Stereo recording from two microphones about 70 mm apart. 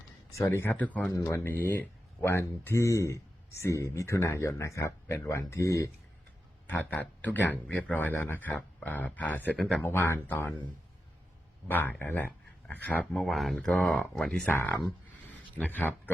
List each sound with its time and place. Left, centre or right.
0.3 s speech: left
0.8 s speech: left
1.1 s speech: left
1.5 s speech: left
6.7 s speech: left
11.7 s speech: left
13.2 s speech: centre
14.4 s speech: left